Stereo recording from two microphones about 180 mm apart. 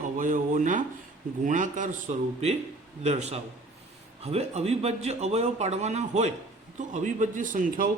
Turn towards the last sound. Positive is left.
turn(degrees=-45)  # may be behind; listen again after turning